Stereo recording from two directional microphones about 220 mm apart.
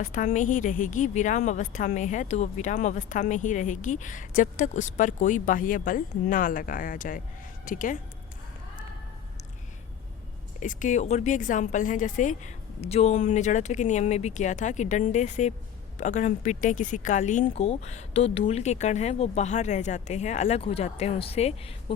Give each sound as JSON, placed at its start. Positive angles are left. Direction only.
{"t": 0.0, "sound": "a woman's voice", "side_deg": 35}
{"t": 10.6, "sound": "a woman's voice", "side_deg": 35}